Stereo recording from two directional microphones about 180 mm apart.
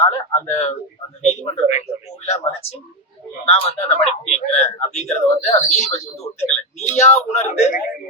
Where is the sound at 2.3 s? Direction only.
35° left (ahead or behind).